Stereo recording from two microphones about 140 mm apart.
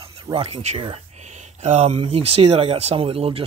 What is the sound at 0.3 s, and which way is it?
Speech, 45° right (ahead or behind).